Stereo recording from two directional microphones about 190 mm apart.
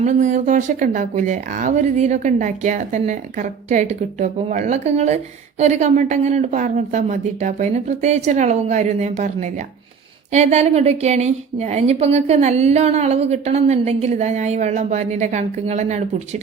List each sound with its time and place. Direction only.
0.0 s speech: 40° right (ahead or behind)